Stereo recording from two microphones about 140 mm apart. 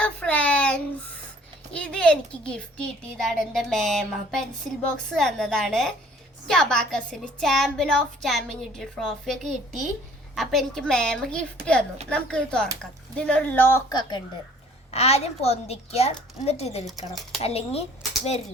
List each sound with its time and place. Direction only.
0.0 s a sound: 10° left (ahead or behind)
1.7 s a child's voice: 5° left (ahead or behind)
13.9 s a woman's voice: 30° left (ahead or behind)
14.8 s a child's voice: 50° left (ahead or behind)